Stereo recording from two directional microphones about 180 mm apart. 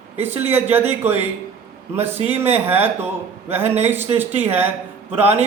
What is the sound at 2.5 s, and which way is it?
A man's voice, 10° right (ahead or behind).